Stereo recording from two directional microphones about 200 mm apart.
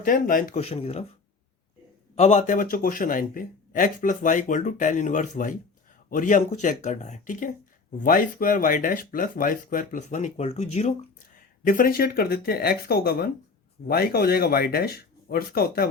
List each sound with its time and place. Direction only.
0.0 s speech: 45° left (ahead or behind)
2.1 s speech: 35° left (ahead or behind)
11.3 s speech: 45° left (ahead or behind)